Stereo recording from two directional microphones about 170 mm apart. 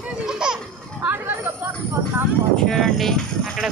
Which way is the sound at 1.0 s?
10° right (ahead or behind).